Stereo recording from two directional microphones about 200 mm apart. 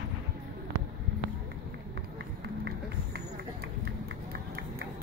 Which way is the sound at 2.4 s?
55° right (ahead or behind).